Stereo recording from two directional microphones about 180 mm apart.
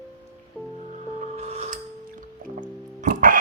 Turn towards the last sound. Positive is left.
turn(degrees=-50)  # may be behind; listen again after turning